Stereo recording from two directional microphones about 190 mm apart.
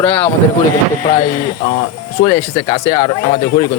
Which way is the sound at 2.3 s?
20° left (ahead or behind).